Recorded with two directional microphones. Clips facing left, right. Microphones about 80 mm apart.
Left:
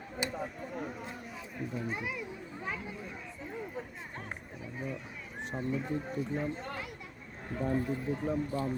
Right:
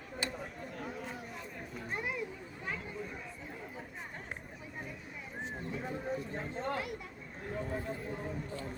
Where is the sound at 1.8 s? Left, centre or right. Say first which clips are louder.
Left 1 dB; centre.